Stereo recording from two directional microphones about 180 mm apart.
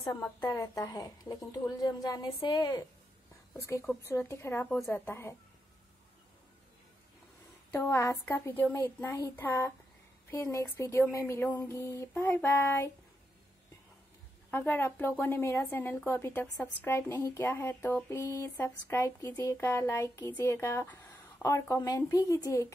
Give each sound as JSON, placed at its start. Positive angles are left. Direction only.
{"t": 0.0, "sound": "a woman's voice", "side_deg": 15}
{"t": 4.0, "sound": "a woman's voice", "side_deg": 15}
{"t": 7.7, "sound": "a woman's voice", "side_deg": 15}
{"t": 14.5, "sound": "a woman's voice", "side_deg": 10}